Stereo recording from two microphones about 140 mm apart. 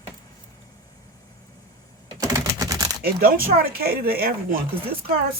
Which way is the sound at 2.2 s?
25° right (ahead or behind).